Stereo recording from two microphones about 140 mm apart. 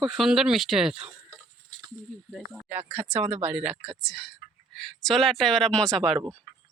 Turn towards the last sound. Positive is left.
turn(degrees=5)  # may be behind; listen again after turning